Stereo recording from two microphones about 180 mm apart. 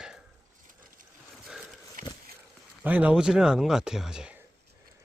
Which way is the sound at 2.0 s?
50° right (ahead or behind).